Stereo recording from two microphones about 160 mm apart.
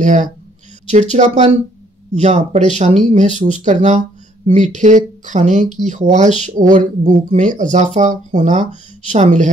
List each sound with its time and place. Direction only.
0.0 s speech: 50° right (ahead or behind)